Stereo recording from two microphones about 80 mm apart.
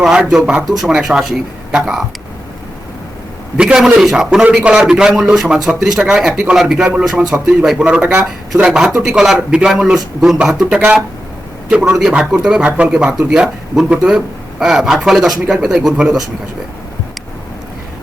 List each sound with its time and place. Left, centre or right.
0.0 s a man's voice: centre
3.6 s a man's voice: centre